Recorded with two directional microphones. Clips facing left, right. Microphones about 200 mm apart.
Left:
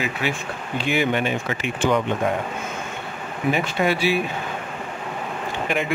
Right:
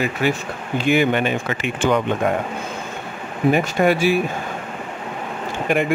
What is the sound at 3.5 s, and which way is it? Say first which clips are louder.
Speech: right 4 dB; 50° right (ahead or behind).